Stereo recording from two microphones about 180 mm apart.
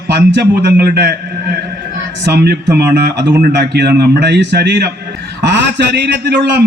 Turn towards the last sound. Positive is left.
turn(degrees=-75)  # may be behind; listen again after turning